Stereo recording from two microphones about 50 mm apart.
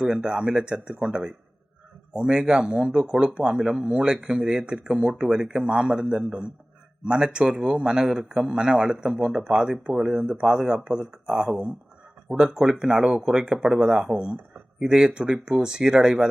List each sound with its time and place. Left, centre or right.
0.0 s speech: centre